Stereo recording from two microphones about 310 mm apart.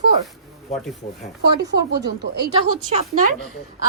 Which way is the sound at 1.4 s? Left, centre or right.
Right.